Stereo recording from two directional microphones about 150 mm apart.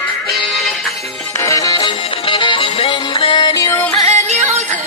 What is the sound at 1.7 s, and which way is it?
Music, 35° left (ahead or behind).